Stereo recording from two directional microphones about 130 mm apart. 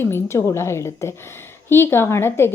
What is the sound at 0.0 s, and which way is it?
A woman's voice, 20° left (ahead or behind).